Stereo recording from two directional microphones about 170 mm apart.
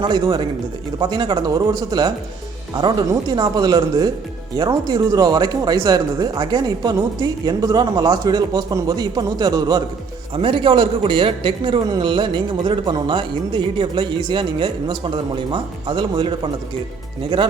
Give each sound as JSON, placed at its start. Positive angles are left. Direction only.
{"t": 0.0, "sound": "a man's voice", "side_deg": -25}